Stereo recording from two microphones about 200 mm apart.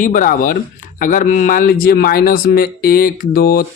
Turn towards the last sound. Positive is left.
turn(degrees=45)  # may be behind; listen again after turning